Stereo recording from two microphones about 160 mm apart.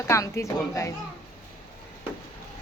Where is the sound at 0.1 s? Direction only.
20° left (ahead or behind).